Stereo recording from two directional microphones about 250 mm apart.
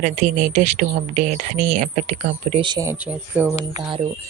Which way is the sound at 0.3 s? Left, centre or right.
Right.